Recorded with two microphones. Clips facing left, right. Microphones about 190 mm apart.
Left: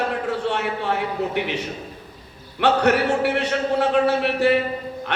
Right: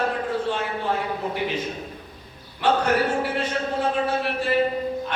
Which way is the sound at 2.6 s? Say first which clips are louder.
Left 3 dB; 70° left (ahead or behind).